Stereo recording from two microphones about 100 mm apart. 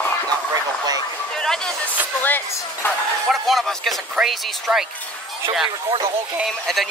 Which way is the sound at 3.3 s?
Centre (ahead or behind).